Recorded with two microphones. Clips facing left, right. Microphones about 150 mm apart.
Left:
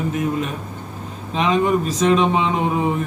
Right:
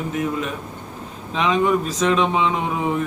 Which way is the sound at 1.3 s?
40° left (ahead or behind).